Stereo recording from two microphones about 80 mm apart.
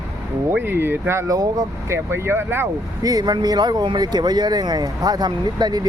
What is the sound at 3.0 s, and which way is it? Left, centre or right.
Speech, right.